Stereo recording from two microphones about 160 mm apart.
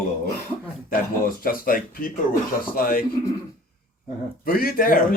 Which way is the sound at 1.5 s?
65° left (ahead or behind).